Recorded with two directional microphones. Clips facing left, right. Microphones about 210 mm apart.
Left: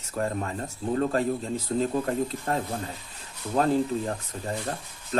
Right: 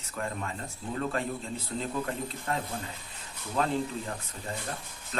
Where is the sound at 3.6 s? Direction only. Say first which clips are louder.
Left 5 dB; 40° left (ahead or behind).